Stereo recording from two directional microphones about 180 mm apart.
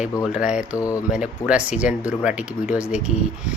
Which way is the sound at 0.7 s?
20° left (ahead or behind).